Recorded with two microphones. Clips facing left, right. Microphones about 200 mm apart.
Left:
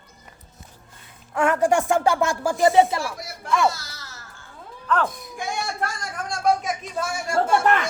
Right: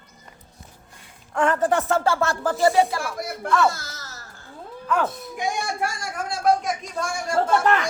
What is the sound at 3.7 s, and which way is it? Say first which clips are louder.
Babbling: right 1 dB; 50° right (ahead or behind).